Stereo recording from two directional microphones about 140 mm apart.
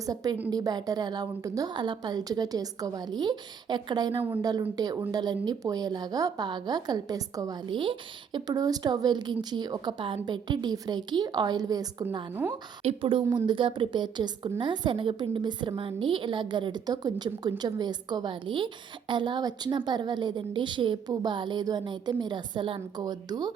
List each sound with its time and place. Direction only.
0.0 s a woman's voice: 25° right (ahead or behind)
4.2 s speech: 15° right (ahead or behind)
4.4 s a woman's voice: 30° right (ahead or behind)
12.3 s speech: 15° right (ahead or behind)
12.8 s a woman's voice: 40° right (ahead or behind)